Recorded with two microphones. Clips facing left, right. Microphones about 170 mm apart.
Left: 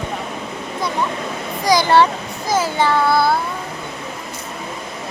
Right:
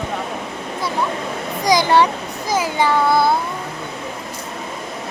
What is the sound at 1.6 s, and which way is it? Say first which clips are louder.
Speech: left 1 dB; 20° right (ahead or behind).